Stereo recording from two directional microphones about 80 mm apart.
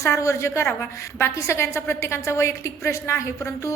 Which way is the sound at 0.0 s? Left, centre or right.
Left.